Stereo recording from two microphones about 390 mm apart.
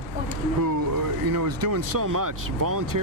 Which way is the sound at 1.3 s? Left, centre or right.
Right.